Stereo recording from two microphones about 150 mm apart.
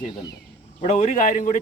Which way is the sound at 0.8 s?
50° left (ahead or behind).